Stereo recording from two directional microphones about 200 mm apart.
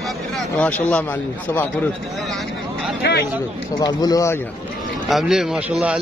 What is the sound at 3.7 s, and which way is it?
Speech, 20° left (ahead or behind).